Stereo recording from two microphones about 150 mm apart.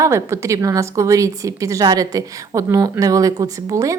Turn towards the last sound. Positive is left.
turn(degrees=-20)  # may be behind; listen again after turning